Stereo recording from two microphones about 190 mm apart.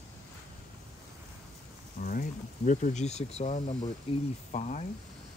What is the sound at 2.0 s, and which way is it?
Speech, 45° left (ahead or behind).